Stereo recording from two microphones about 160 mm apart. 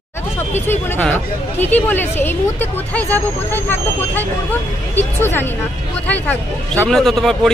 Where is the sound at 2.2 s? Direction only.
10° left (ahead or behind).